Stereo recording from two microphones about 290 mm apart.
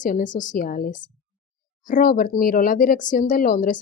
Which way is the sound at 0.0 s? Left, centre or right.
Left.